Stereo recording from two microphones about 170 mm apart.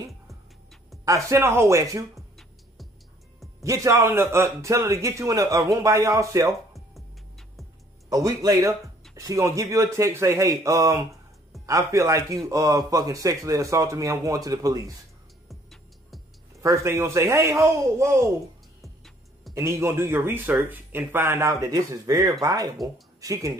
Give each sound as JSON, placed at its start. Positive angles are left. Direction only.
{"t": 1.0, "sound": "speech", "side_deg": -20}
{"t": 2.1, "sound": "music", "side_deg": 0}
{"t": 3.6, "sound": "speech", "side_deg": -20}
{"t": 6.7, "sound": "music", "side_deg": 0}
{"t": 8.1, "sound": "speech", "side_deg": -20}
{"t": 16.6, "sound": "speech", "side_deg": -15}
{"t": 18.8, "sound": "music", "side_deg": 0}
{"t": 19.5, "sound": "speech", "side_deg": -15}